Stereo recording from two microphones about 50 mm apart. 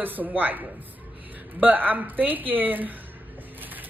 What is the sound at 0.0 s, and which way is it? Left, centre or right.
Speech, right.